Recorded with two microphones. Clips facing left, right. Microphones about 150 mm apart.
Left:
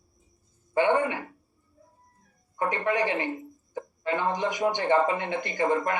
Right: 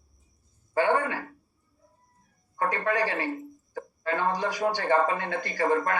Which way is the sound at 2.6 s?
20° left (ahead or behind).